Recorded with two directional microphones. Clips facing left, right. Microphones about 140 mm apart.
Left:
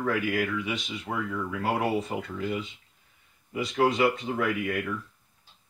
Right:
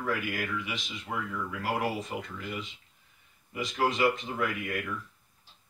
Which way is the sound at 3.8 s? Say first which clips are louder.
Left 3 dB; 30° left (ahead or behind).